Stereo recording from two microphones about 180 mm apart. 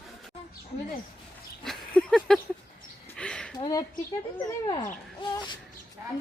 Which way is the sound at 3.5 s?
25° left (ahead or behind).